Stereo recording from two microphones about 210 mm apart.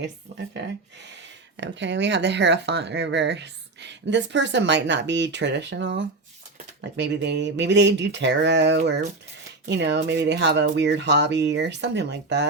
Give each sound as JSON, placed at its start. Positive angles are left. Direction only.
{"t": 1.5, "sound": "speech", "side_deg": -60}